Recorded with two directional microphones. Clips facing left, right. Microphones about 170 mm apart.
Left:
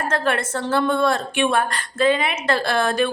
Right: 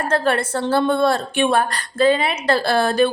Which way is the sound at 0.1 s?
35° right (ahead or behind).